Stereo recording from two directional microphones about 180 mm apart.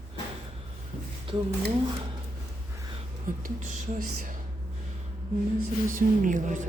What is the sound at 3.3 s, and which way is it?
Speech, 50° right (ahead or behind).